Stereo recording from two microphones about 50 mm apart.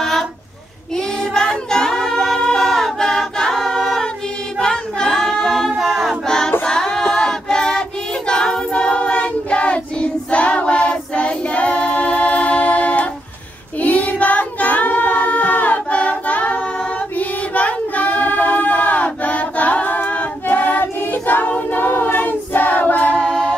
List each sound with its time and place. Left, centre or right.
0.9 s child singing: centre
2.4 s choir: centre
6.2 s choir: centre
8.3 s child singing: centre; by 23.1 s left
23.1 s music: centre